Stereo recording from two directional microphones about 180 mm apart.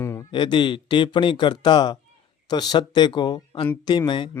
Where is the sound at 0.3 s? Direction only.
25° left (ahead or behind).